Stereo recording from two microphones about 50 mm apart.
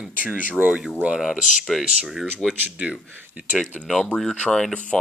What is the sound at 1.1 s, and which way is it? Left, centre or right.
Speech, centre.